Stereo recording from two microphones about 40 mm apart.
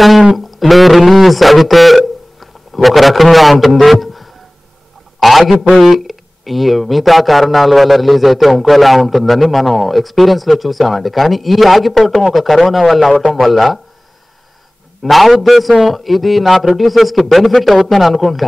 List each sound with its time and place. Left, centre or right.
0.4 s a sound: centre
5.2 s a man's voice: centre
15.0 s speech: centre